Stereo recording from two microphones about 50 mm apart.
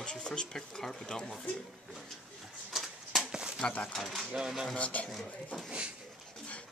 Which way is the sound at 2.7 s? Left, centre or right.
Centre.